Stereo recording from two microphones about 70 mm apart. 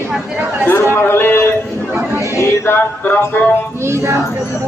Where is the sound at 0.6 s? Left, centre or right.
Left.